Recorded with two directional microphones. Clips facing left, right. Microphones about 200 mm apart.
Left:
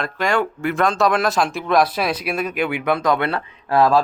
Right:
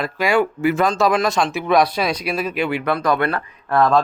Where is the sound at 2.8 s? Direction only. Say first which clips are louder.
Left 2 dB; 20° left (ahead or behind).